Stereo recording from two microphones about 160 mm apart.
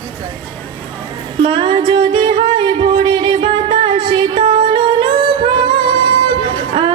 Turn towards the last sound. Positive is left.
turn(degrees=-30)  # may be behind; listen again after turning